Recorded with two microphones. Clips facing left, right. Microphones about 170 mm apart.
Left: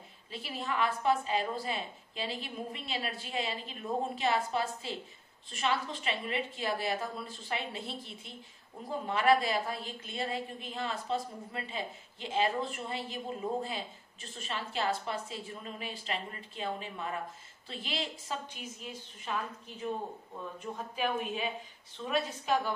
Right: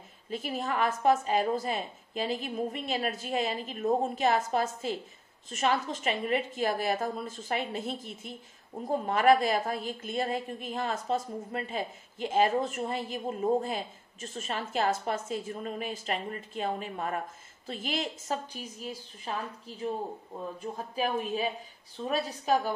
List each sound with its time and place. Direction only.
0.3 s a woman's voice: 45° right (ahead or behind)
20.7 s a woman's voice: 35° right (ahead or behind)